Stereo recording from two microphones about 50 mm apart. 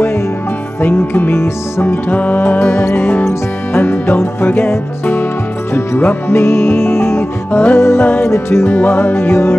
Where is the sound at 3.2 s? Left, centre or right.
Left.